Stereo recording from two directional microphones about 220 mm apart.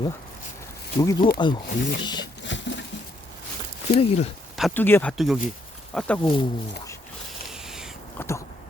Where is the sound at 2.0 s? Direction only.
20° left (ahead or behind).